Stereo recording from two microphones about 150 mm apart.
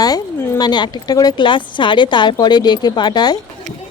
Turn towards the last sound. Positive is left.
turn(degrees=30)  # may be behind; listen again after turning